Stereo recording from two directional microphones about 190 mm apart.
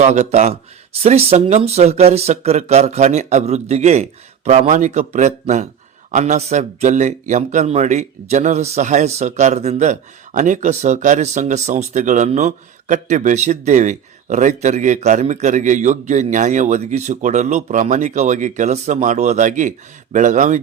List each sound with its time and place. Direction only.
0.0 s speech: 40° right (ahead or behind)